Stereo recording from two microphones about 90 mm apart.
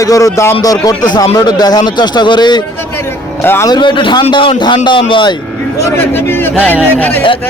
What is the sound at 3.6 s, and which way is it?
A man's voice, 55° left (ahead or behind).